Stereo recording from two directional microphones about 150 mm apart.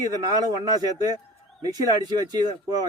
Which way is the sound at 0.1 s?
25° right (ahead or behind).